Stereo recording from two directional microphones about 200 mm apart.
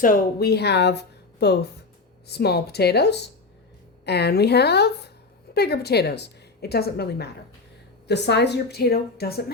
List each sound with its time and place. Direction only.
0.0 s a woman's voice: 45° left (ahead or behind)